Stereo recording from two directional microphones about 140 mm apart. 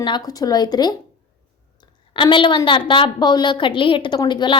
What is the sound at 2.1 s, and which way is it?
A woman's voice, 35° left (ahead or behind).